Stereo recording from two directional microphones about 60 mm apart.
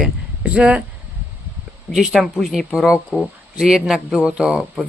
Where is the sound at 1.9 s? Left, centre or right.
Centre.